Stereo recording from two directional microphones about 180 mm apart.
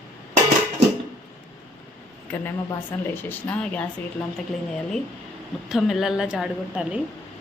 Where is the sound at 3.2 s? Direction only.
10° left (ahead or behind).